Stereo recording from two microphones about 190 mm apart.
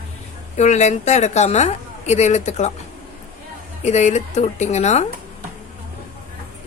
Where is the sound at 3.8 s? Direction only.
35° left (ahead or behind).